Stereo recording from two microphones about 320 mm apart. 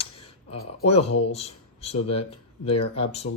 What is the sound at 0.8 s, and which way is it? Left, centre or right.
Speech, centre.